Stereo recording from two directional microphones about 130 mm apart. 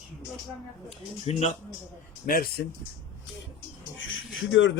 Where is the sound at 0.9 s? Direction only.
55° left (ahead or behind).